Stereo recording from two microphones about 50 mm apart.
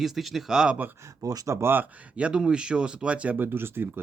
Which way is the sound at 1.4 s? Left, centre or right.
Right.